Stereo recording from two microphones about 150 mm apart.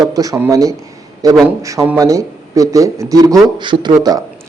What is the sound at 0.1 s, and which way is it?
A man's voice, 25° right (ahead or behind).